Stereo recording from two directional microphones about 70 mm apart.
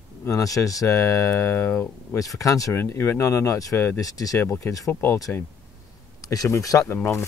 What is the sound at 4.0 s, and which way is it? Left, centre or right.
Speech, left.